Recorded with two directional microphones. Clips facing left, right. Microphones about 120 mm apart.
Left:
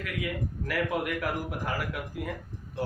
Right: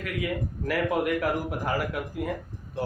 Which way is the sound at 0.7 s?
35° right (ahead or behind).